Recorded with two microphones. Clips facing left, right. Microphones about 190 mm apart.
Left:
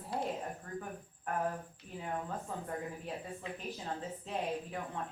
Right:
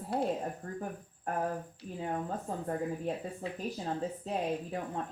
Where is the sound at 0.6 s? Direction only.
40° right (ahead or behind).